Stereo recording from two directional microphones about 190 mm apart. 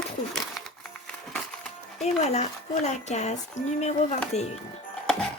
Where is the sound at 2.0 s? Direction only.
35° left (ahead or behind).